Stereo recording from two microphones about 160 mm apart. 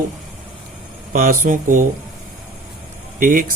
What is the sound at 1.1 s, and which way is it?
Speech, 55° right (ahead or behind).